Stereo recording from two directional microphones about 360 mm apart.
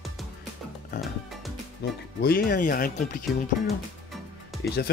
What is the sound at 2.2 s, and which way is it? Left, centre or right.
Speech, left.